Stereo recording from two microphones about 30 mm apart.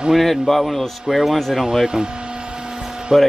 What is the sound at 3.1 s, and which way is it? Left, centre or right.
Speech, right.